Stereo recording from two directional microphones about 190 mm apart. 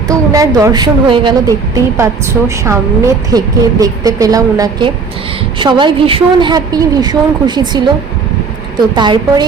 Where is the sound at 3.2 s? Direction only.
20° right (ahead or behind).